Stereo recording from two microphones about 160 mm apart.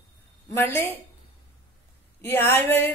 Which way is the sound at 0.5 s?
15° left (ahead or behind).